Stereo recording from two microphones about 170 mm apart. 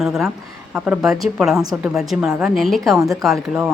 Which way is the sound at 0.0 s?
Centre (ahead or behind).